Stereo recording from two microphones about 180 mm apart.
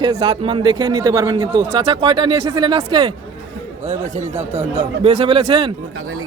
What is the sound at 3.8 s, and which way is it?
Speech, 40° right (ahead or behind).